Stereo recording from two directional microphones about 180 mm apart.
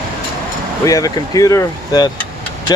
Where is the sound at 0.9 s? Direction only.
20° left (ahead or behind).